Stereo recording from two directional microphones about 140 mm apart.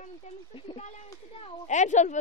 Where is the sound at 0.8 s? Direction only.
55° left (ahead or behind).